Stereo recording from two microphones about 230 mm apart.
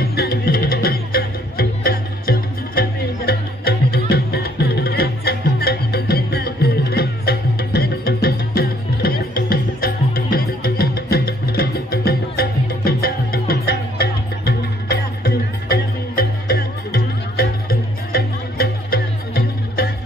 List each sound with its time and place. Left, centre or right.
0.1 s music: left